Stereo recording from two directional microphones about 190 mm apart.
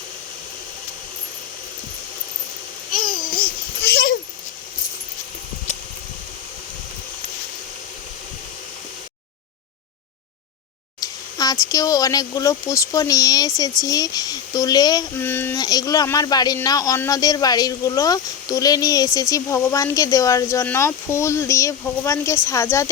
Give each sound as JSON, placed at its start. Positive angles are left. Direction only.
{"t": 2.9, "sound": "babbling", "side_deg": 50}
{"t": 11.0, "sound": "speech", "side_deg": 20}